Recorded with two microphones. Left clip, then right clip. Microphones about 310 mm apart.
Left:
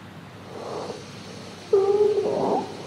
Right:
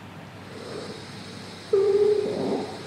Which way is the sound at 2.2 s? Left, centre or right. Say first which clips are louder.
Left 4 dB; left.